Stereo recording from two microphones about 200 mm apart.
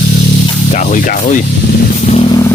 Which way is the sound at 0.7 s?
40° left (ahead or behind).